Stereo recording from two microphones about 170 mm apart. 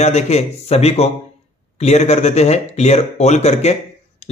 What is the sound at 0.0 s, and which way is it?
A man's voice, 40° left (ahead or behind).